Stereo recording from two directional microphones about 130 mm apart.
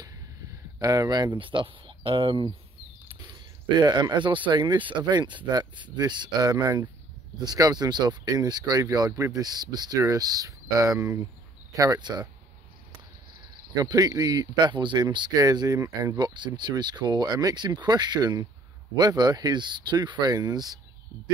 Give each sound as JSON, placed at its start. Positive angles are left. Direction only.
{"t": 0.7, "sound": "speech", "side_deg": -30}
{"t": 3.7, "sound": "speech", "side_deg": -35}
{"t": 13.7, "sound": "speech", "side_deg": -30}
{"t": 16.2, "sound": "speech", "side_deg": -35}